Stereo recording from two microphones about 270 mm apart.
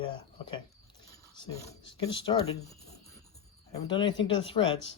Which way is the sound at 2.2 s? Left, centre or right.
Centre.